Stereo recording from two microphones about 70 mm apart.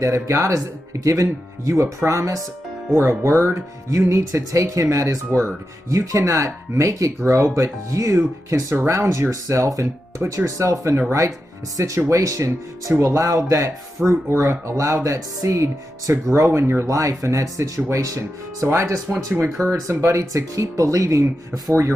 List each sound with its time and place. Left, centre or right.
0.0 s speech: right